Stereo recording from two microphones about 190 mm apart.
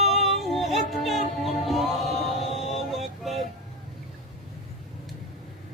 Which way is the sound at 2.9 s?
Centre (ahead or behind).